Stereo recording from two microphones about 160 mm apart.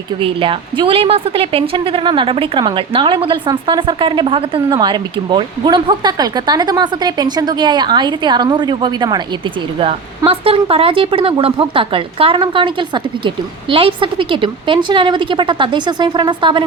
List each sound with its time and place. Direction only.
0.2 s a woman's voice: 35° right (ahead or behind)
10.2 s speech: 35° right (ahead or behind)